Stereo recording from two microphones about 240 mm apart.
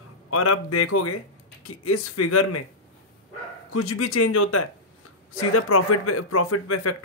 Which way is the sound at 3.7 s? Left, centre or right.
Left.